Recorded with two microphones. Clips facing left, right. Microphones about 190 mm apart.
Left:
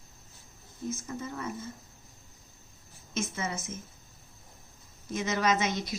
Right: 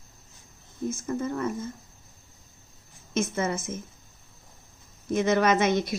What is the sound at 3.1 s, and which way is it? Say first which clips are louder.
Speech: right 7 dB; 50° right (ahead or behind).